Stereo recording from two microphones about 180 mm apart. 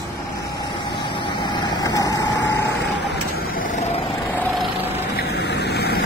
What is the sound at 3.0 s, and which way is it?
Vehicle, 65° left (ahead or behind).